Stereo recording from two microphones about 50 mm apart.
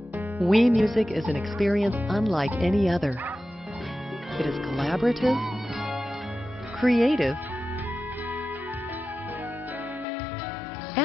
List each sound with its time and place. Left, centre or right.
0.4 s speech: centre
4.4 s speech: centre